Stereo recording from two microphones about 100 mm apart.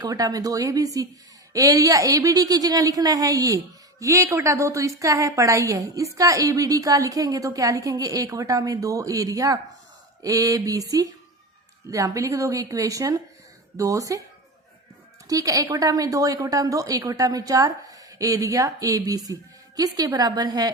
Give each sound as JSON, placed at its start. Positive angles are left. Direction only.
{"t": 0.0, "sound": "a woman's voice", "side_deg": -35}
{"t": 15.3, "sound": "a woman's voice", "side_deg": -35}